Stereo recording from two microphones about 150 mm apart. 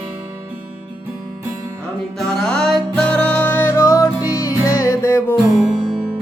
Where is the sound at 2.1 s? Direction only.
5° left (ahead or behind).